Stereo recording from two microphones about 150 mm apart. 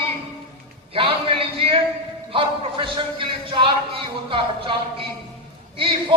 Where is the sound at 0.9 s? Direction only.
35° right (ahead or behind).